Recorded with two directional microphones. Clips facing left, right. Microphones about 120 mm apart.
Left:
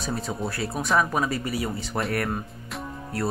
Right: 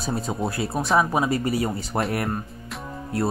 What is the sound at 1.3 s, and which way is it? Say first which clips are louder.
Speech: right 5 dB; 40° right (ahead or behind).